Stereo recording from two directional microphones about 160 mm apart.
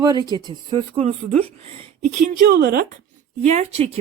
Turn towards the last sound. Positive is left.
turn(degrees=-40)  # may be behind; listen again after turning